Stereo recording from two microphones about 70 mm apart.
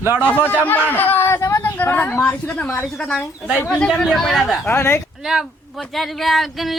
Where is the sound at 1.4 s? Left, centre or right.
Left.